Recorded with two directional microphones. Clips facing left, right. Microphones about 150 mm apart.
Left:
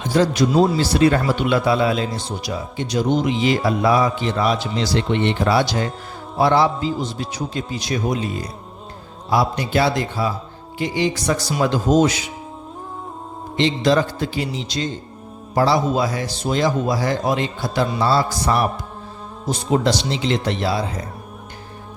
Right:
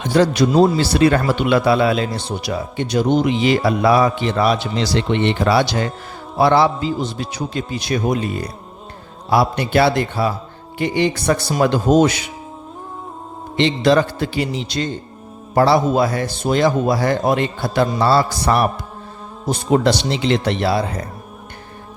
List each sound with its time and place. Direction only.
0.0 s a man's voice: 65° right (ahead or behind)
13.6 s a man's voice: 65° right (ahead or behind)